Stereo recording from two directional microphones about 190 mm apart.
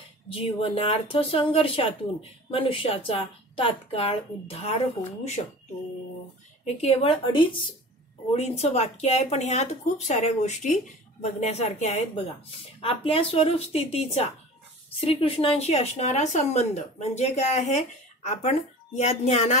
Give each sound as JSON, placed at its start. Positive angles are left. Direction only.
{"t": 0.3, "sound": "a woman's voice", "side_deg": 30}
{"t": 6.6, "sound": "speech", "side_deg": 35}